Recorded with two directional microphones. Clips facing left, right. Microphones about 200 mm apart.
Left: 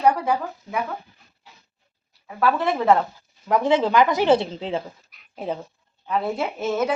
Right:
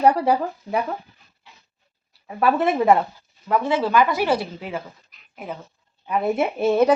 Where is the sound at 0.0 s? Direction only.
35° right (ahead or behind).